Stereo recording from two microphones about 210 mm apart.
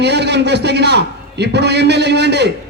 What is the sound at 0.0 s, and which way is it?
A man's voice, 55° right (ahead or behind).